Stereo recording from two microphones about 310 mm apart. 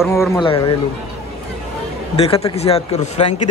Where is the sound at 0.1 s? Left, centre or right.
Centre.